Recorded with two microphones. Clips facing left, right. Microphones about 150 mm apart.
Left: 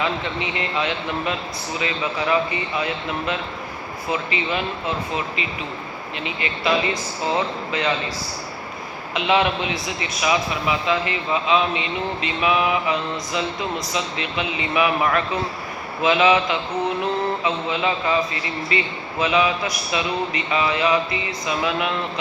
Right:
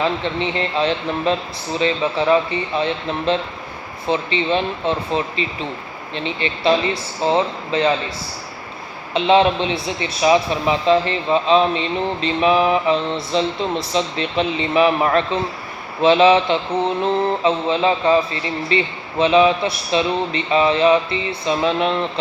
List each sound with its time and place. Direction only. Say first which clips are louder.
0.0 s a man's voice: right 4 dB; 30° right (ahead or behind)
9.1 s a man's voice: right 5 dB; 30° right (ahead or behind)